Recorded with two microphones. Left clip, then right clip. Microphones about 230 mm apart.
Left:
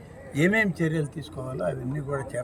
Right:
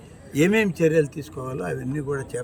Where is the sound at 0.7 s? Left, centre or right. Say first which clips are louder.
Right 9 dB; centre.